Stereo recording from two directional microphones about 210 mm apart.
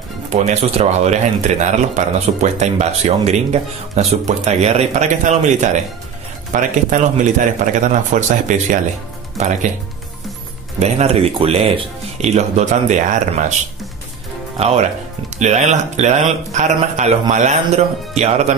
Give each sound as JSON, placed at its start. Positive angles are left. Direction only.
{"t": 0.3, "sound": "speech", "side_deg": -30}
{"t": 10.8, "sound": "speech", "side_deg": -30}
{"t": 14.6, "sound": "speech", "side_deg": -30}